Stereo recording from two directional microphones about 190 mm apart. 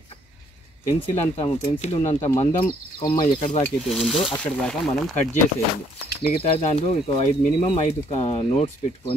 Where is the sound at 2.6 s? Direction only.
20° left (ahead or behind).